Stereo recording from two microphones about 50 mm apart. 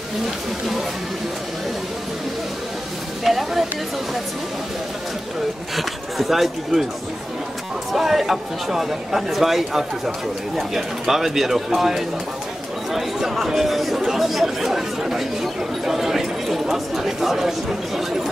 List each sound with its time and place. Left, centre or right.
3.3 s speech: centre
5.8 s speech: centre
7.9 s speech: centre